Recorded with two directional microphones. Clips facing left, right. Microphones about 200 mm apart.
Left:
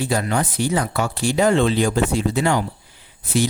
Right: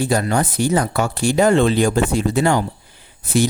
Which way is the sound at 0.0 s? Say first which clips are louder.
Right 3 dB; 45° right (ahead or behind).